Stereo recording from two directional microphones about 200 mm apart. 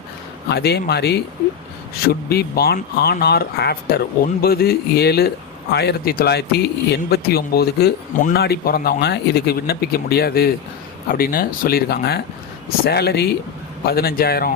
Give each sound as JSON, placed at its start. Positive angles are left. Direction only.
{"t": 0.4, "sound": "speech", "side_deg": 55}